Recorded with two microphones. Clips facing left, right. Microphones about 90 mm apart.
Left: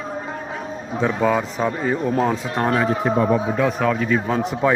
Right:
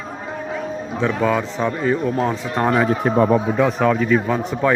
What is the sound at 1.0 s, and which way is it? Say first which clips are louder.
A man's voice: even; 25° left (ahead or behind).